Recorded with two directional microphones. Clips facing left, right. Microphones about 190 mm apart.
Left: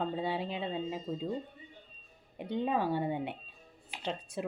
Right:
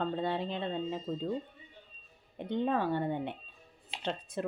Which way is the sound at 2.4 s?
10° left (ahead or behind).